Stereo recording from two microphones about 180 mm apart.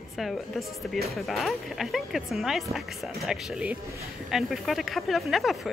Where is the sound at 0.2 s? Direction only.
Centre (ahead or behind).